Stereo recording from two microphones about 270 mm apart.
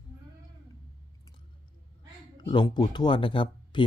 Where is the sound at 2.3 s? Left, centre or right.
Centre.